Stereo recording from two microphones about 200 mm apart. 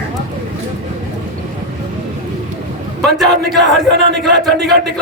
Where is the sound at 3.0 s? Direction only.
Centre (ahead or behind).